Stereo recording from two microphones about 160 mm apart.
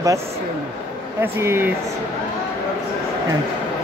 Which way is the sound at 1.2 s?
15° right (ahead or behind).